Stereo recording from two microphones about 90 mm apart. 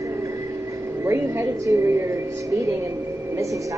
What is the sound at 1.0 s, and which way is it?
A woman's voice, 30° right (ahead or behind).